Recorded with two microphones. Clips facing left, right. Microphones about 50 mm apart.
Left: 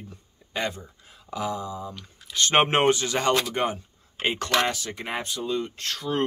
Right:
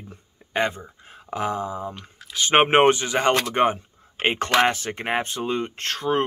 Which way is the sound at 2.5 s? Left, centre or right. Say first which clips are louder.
Right 4 dB; right.